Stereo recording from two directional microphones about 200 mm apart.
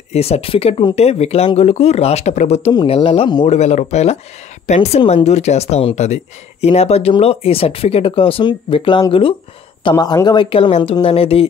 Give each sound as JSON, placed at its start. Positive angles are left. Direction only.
{"t": 0.1, "sound": "speech", "side_deg": 30}
{"t": 3.4, "sound": "speech", "side_deg": 35}